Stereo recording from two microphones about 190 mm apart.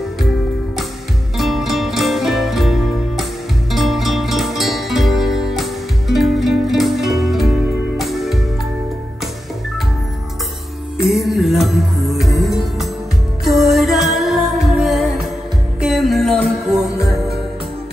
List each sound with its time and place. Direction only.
1.4 s music: centre (ahead or behind)
11.1 s music: centre (ahead or behind)